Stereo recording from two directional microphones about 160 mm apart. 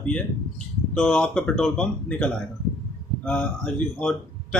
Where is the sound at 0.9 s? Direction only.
10° left (ahead or behind).